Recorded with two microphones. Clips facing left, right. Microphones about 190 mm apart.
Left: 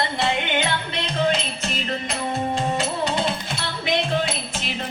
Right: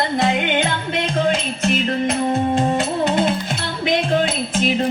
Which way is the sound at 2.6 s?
55° right (ahead or behind).